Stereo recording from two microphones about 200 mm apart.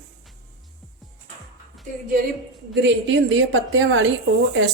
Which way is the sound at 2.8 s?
70° right (ahead or behind).